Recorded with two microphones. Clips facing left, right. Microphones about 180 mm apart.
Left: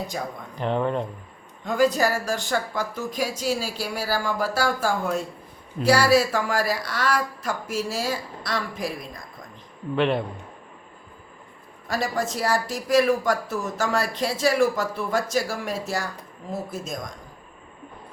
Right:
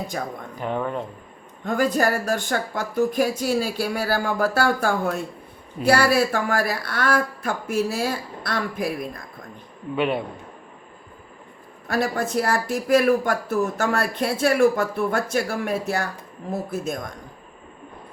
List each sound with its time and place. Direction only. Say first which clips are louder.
0.6 s speech: left 2 dB; 5° right (ahead or behind)
1.6 s speech: even; 55° right (ahead or behind)
9.9 s a man's voice: left 1 dB; 5° right (ahead or behind)
11.9 s speech: right 2 dB; 60° right (ahead or behind)